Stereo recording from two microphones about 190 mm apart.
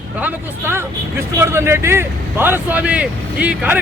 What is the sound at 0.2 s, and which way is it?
Speech, 10° right (ahead or behind).